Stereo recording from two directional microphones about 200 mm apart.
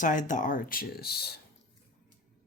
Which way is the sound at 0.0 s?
40° left (ahead or behind).